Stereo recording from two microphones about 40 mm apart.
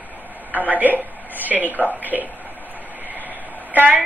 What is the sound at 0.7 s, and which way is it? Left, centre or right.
Speech, right.